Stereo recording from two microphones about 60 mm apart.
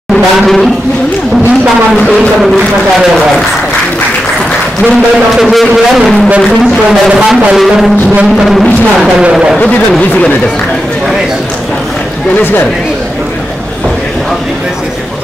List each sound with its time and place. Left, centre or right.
0.1 s speech: centre
5.4 s speech: centre
9.3 s speech: centre